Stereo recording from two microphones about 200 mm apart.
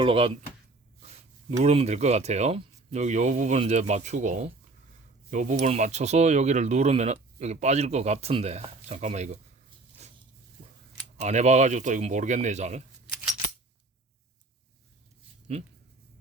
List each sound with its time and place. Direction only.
0.0 s speech: 25° right (ahead or behind)
11.2 s speech: 35° right (ahead or behind)
15.5 s speech: 30° right (ahead or behind)